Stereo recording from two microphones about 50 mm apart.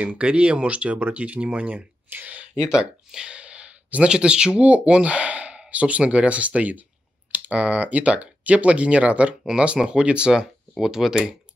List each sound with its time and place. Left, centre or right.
0.0 s speech: right
2.0 s a sound: right
2.5 s speech: centre
9.5 s speech: centre